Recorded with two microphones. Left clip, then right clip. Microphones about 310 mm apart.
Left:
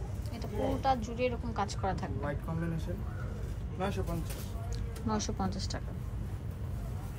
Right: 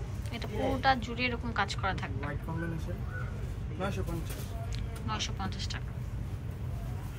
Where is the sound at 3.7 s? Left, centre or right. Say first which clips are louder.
Left 1 dB; centre.